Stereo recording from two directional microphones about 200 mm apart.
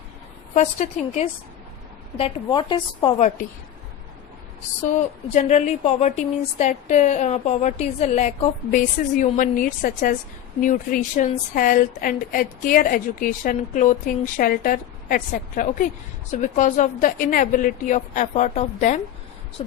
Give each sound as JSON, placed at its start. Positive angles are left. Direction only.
{"t": 0.5, "sound": "a woman's voice", "side_deg": 35}
{"t": 4.9, "sound": "a woman's voice", "side_deg": 35}